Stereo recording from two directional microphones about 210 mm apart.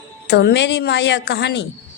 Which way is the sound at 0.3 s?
50° left (ahead or behind).